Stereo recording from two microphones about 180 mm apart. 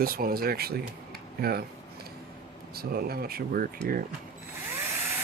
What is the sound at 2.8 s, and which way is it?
Speech, 60° right (ahead or behind).